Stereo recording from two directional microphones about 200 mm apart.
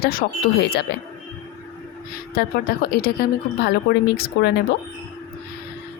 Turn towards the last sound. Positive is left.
turn(degrees=50)  # may be behind; listen again after turning